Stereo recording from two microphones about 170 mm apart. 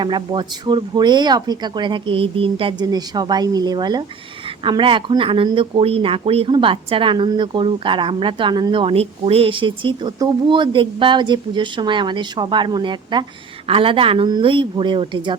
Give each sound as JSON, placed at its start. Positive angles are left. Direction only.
{"t": 0.0, "sound": "speech", "side_deg": -25}